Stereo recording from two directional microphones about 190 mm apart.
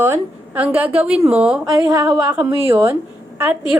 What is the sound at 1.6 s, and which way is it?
A woman's voice, 20° right (ahead or behind).